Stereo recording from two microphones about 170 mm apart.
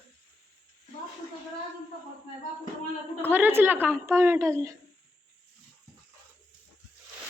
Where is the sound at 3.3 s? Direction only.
10° right (ahead or behind).